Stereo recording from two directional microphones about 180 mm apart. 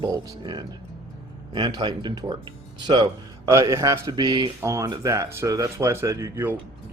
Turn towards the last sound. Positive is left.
turn(degrees=-15)  # may be behind; listen again after turning